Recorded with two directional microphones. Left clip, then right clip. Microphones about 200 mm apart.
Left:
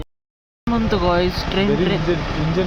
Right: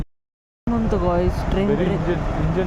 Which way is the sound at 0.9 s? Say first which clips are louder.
Left 3 dB; centre (ahead or behind).